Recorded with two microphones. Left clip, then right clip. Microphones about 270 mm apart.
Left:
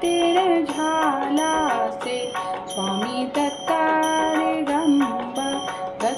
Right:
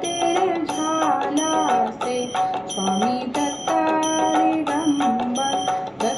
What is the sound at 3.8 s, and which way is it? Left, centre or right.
Music, left.